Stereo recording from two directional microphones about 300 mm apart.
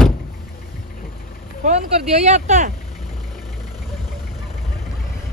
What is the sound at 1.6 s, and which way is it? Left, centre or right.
Speech, right.